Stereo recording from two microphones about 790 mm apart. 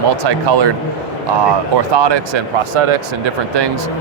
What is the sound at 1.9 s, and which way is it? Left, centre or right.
Speech, right.